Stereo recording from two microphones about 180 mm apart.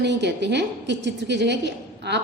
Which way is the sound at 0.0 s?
70° right (ahead or behind).